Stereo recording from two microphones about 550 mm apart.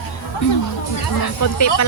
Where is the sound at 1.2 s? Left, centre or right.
Left.